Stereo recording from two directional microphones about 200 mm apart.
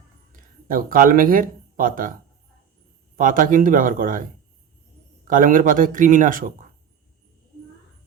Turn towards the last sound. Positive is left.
turn(degrees=-40)  # may be behind; listen again after turning